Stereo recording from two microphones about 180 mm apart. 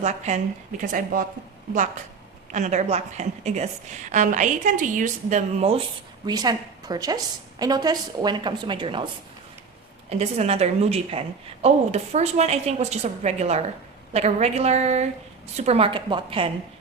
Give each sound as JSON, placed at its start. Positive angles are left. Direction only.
{"t": 0.0, "sound": "a woman's voice", "side_deg": -40}
{"t": 2.5, "sound": "a woman's voice", "side_deg": -40}
{"t": 6.2, "sound": "a woman's voice", "side_deg": -20}
{"t": 10.1, "sound": "a woman's voice", "side_deg": -35}